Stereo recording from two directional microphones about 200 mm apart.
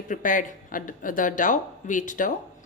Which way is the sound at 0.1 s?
40° left (ahead or behind).